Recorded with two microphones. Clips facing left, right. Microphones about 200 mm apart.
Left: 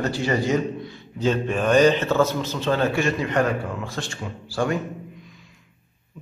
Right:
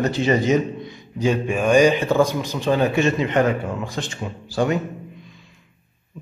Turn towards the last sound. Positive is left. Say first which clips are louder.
# right 3 dB
turn(degrees=-20)  # may be behind; listen again after turning